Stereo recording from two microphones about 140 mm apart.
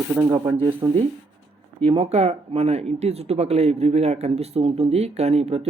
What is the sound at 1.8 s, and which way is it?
Speech, 40° right (ahead or behind).